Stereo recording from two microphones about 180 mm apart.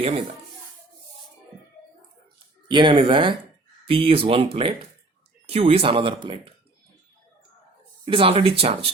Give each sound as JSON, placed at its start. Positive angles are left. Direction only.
{"t": 2.6, "sound": "speech", "side_deg": -25}
{"t": 8.0, "sound": "speech", "side_deg": -30}